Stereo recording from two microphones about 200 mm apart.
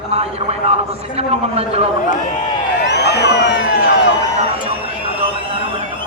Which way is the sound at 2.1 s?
40° left (ahead or behind).